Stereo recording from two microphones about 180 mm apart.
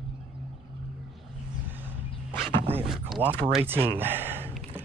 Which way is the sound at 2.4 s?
35° right (ahead or behind).